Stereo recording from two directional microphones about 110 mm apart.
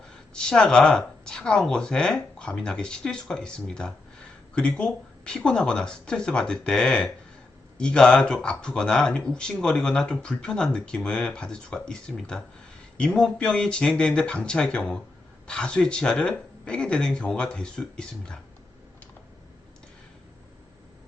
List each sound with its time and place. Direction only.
0.1 s speech: 5° left (ahead or behind)